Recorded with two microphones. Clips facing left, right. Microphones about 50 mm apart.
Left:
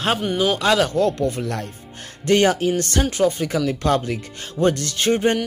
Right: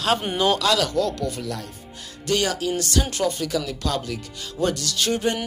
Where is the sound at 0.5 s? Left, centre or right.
Left.